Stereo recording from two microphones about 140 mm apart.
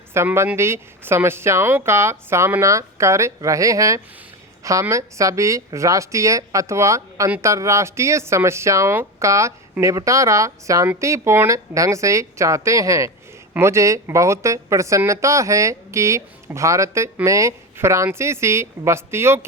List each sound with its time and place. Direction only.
0.1 s a woman's voice: 20° right (ahead or behind)